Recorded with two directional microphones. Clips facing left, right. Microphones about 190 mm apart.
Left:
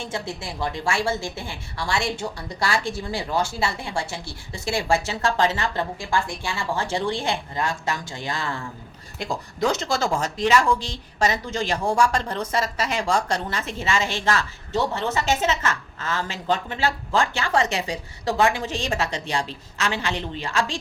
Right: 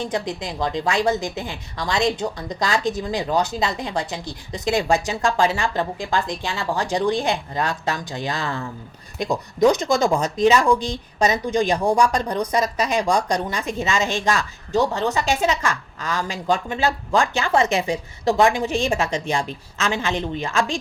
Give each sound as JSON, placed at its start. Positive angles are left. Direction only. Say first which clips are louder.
{"t": 0.0, "sound": "a woman's voice", "louder": "right 5 dB", "side_deg": -15}